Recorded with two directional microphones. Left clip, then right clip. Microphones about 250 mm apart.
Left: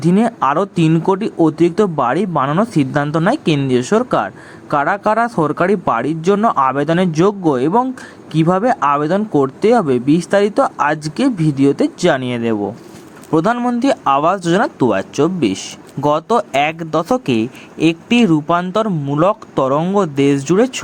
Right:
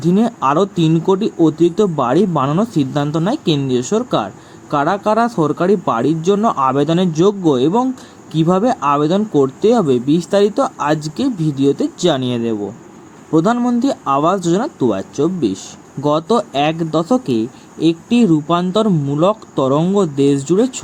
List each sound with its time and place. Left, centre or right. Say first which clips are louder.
0.0 s speech: left 1 dB; centre
17.2 s speech: left 1 dB; left
17.8 s speech: left 1 dB; centre
18.9 s speech: even; centre
20.0 s speech: even; centre